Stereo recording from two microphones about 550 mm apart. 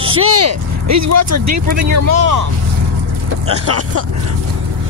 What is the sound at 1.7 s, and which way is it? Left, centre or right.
Speech, right.